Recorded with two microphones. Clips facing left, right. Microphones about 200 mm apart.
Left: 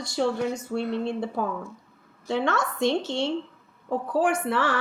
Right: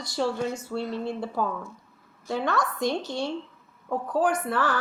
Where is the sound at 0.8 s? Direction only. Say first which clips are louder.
Left 4 dB; 65° left (ahead or behind).